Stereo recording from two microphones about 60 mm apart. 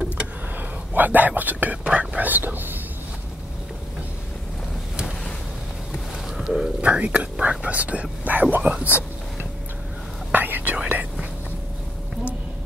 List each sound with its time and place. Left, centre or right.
0.6 s speech: right
6.3 s a sound: centre
6.8 s speech: right
10.3 s whispering: right